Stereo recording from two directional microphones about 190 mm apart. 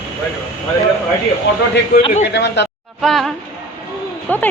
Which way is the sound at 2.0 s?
30° left (ahead or behind).